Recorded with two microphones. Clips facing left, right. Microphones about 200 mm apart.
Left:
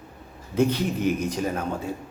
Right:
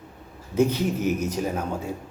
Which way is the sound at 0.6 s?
10° right (ahead or behind).